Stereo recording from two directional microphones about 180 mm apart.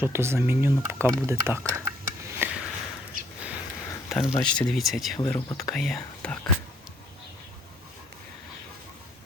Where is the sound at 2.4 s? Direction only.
10° right (ahead or behind).